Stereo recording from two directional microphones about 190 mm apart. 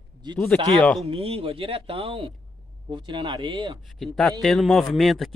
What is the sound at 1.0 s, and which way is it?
Speech, 30° right (ahead or behind).